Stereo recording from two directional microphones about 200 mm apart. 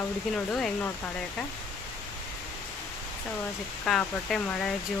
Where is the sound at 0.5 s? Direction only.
5° left (ahead or behind).